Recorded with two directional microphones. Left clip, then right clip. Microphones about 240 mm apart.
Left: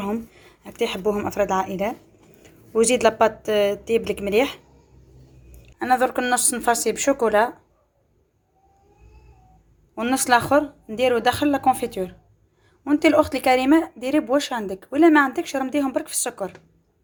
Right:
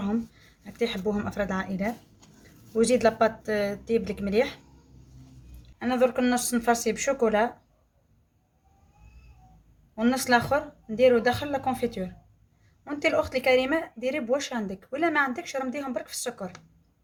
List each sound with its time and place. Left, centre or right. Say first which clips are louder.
0.6 s a woman's voice: left 5 dB; centre
5.8 s speech: left 4 dB; centre
9.9 s a woman's voice: left 4 dB; centre